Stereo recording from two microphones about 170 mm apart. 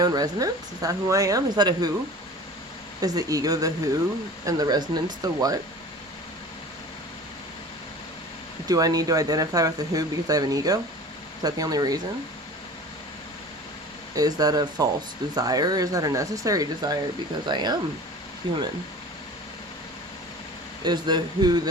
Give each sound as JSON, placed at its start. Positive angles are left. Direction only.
{"t": 0.0, "sound": "speech", "side_deg": -25}
{"t": 3.0, "sound": "speech", "side_deg": -20}
{"t": 8.6, "sound": "speech", "side_deg": -20}
{"t": 14.2, "sound": "speech", "side_deg": -20}
{"t": 20.8, "sound": "speech", "side_deg": -25}